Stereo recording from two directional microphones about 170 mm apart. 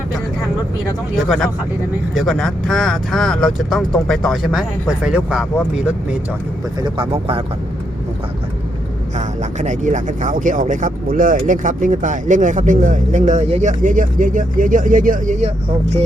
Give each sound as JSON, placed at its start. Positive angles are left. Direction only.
{"t": 1.2, "sound": "speech", "side_deg": 0}
{"t": 6.8, "sound": "speech", "side_deg": -30}
{"t": 9.1, "sound": "speech", "side_deg": -45}